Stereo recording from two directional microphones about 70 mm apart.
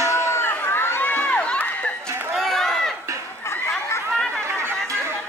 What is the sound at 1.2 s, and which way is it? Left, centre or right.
Run, centre.